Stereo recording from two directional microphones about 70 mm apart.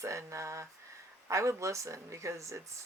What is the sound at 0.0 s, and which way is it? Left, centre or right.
Speech, right.